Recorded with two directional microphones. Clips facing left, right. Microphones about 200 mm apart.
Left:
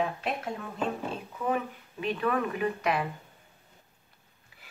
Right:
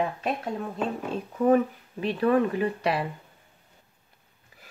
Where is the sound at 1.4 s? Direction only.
40° right (ahead or behind).